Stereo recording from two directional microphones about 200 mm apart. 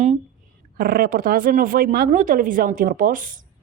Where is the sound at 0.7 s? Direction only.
45° right (ahead or behind).